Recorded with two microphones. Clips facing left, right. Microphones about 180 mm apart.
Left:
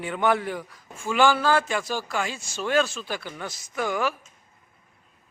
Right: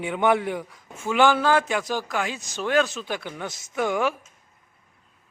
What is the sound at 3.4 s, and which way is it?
Speech, 20° right (ahead or behind).